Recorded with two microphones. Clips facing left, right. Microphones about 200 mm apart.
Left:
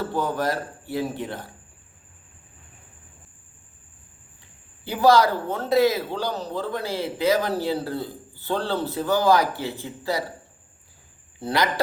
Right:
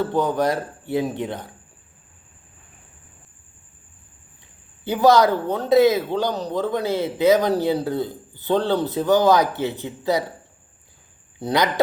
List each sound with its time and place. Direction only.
0.0 s a man's voice: 20° right (ahead or behind)
4.9 s a man's voice: 20° right (ahead or behind)
11.3 s a man's voice: 20° right (ahead or behind)